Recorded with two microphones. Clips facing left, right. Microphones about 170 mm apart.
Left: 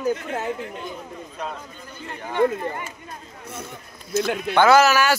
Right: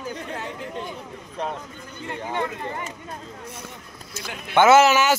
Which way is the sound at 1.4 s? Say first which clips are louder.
Right 4 dB; 30° right (ahead or behind).